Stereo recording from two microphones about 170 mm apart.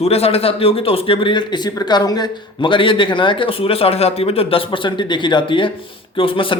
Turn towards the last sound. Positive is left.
turn(degrees=30)  # may be behind; listen again after turning